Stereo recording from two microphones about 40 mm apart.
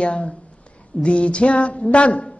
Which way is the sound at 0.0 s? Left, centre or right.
Left.